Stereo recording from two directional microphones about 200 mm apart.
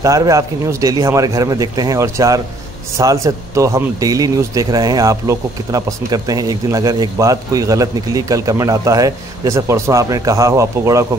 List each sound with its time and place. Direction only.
0.0 s speech: 15° right (ahead or behind)